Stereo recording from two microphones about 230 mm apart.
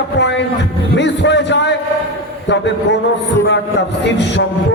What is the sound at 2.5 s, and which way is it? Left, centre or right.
Speech, left.